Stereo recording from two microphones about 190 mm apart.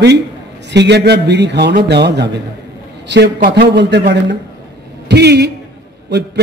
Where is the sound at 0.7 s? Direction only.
60° right (ahead or behind).